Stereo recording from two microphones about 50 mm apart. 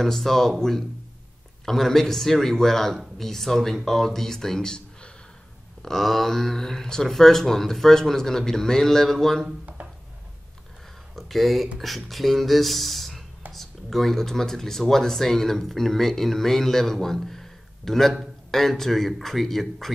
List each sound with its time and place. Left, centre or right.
0.0 s speech: centre
9.8 s a sound: right
11.1 s speech: centre